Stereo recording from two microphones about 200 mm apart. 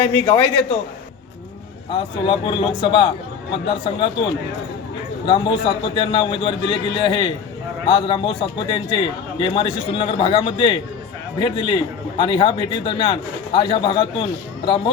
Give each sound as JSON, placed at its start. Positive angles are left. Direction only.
{"t": 0.0, "sound": "a man's voice", "side_deg": 25}
{"t": 1.9, "sound": "a man's voice", "side_deg": 25}
{"t": 5.2, "sound": "a man's voice", "side_deg": 25}